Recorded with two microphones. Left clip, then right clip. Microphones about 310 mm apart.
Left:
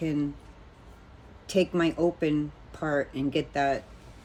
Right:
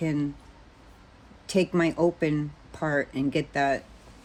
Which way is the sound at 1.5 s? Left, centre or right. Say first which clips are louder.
Right 1 dB; right.